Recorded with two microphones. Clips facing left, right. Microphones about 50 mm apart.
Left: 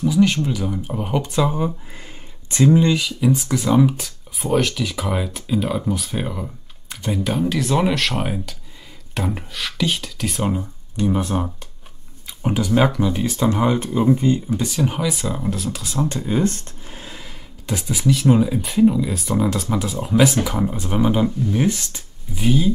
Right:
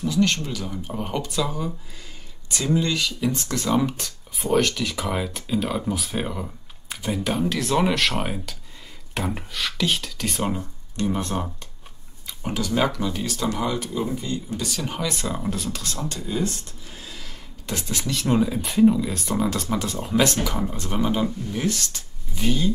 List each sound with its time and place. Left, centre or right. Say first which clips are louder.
0.0 s speech: left 5 dB; centre
1.3 s speech: left 6 dB; left
3.0 s speech: left 5 dB; centre
12.3 s speech: left 6 dB; centre
14.5 s speech: left 7 dB; centre
16.0 s speech: left 8 dB; left
17.6 s speech: left 8 dB; centre
20.5 s speech: left 5 dB; centre